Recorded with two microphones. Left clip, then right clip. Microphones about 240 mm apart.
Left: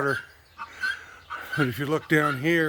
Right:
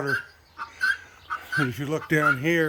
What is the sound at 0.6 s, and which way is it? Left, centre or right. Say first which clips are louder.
Dog: right 4 dB; right.